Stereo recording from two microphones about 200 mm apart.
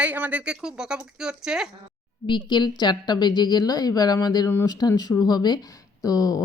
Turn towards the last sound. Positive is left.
turn(degrees=15)  # may be behind; listen again after turning